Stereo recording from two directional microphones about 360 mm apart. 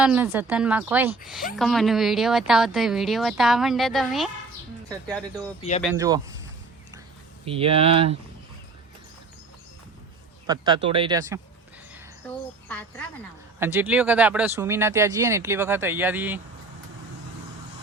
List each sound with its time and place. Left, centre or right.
0.0 s speech: centre
5.8 s speech: centre
7.4 s speech: centre
10.4 s speech: centre
13.6 s speech: centre